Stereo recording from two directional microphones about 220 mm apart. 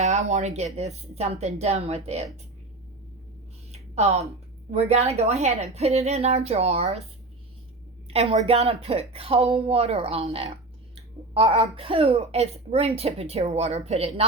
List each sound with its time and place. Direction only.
0.0 s speech: 30° right (ahead or behind)
3.7 s a sound: 30° right (ahead or behind)
4.7 s speech: 30° right (ahead or behind)
8.0 s speech: 25° right (ahead or behind)